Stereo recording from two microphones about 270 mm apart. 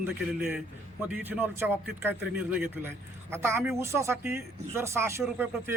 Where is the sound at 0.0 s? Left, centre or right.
Centre.